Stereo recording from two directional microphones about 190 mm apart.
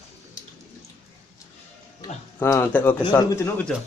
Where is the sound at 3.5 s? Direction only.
5° left (ahead or behind).